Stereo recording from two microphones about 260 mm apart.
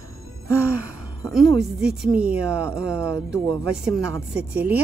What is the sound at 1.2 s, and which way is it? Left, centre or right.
A woman's voice, centre.